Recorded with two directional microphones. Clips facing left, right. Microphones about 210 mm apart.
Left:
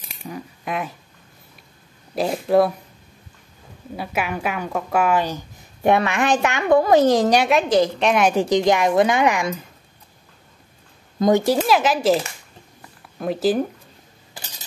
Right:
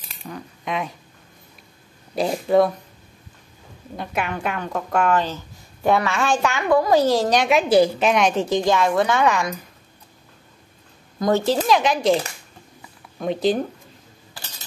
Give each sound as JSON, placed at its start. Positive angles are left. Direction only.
{"t": 0.2, "sound": "speech", "side_deg": 5}
{"t": 2.1, "sound": "speech", "side_deg": 0}
{"t": 3.9, "sound": "a woman's voice", "side_deg": 5}
{"t": 7.4, "sound": "a woman's voice", "side_deg": -5}
{"t": 11.1, "sound": "a woman's voice", "side_deg": 15}
{"t": 13.2, "sound": "speech", "side_deg": 5}